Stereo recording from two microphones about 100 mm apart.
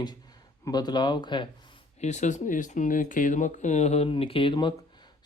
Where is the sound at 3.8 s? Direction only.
90° left; by 4.8 s 50° left (ahead or behind).